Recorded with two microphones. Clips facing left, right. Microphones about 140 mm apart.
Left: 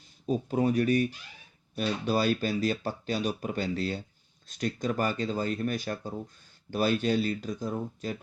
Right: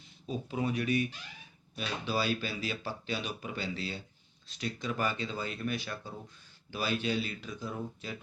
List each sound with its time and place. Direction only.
0.3 s speech: 45° left (ahead or behind)